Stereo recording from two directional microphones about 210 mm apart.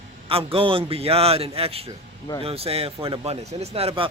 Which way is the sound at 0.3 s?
25° right (ahead or behind).